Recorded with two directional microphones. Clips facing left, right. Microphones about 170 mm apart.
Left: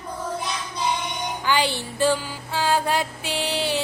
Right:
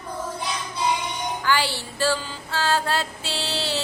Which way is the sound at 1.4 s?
20° left (ahead or behind).